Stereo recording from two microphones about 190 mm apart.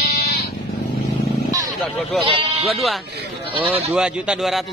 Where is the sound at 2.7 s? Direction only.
Centre (ahead or behind).